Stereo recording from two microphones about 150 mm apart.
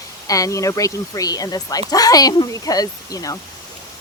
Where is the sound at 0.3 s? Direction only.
20° left (ahead or behind).